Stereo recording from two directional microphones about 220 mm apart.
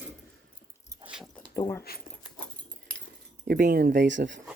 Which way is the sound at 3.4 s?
45° right (ahead or behind).